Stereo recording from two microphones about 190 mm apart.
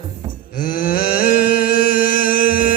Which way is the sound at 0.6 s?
50° left (ahead or behind).